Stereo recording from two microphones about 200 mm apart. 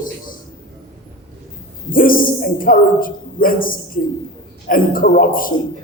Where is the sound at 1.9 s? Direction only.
45° left (ahead or behind).